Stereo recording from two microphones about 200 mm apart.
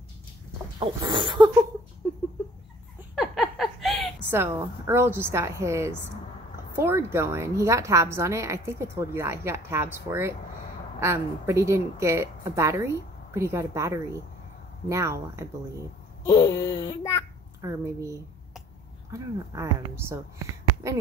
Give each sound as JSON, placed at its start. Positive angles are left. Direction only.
{"t": 0.7, "sound": "dog", "side_deg": -20}
{"t": 3.2, "sound": "a sound", "side_deg": 0}
{"t": 4.3, "sound": "a woman's voice", "side_deg": -10}
{"t": 16.3, "sound": "speech", "side_deg": 15}
{"t": 17.6, "sound": "a woman's voice", "side_deg": -15}
{"t": 19.1, "sound": "a woman's voice", "side_deg": -15}